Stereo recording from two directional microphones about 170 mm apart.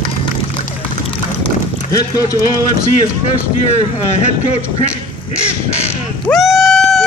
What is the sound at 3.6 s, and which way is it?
Speech, 40° left (ahead or behind).